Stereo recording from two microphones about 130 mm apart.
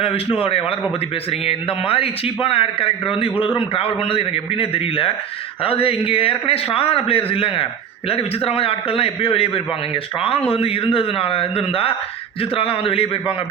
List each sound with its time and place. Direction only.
0.0 s a man's voice: 45° left (ahead or behind)